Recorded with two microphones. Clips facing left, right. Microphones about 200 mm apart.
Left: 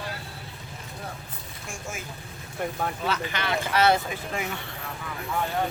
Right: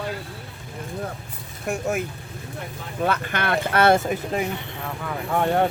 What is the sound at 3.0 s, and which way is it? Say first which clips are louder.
Speech: right 9 dB; 55° right (ahead or behind).